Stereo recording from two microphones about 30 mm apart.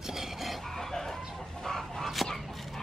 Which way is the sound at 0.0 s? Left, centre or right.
Centre.